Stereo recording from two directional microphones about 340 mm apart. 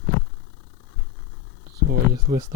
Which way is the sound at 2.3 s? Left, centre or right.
Right.